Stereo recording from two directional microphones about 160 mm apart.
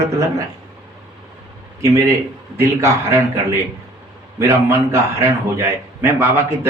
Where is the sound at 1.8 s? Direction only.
20° right (ahead or behind).